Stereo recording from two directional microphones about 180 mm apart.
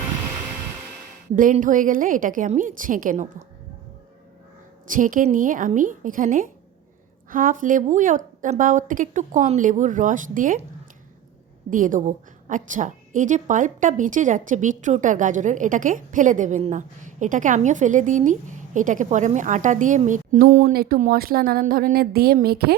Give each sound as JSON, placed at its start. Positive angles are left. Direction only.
{"t": 1.4, "sound": "a woman's voice", "side_deg": -45}
{"t": 4.9, "sound": "a woman's voice", "side_deg": -45}
{"t": 11.7, "sound": "a woman's voice", "side_deg": -45}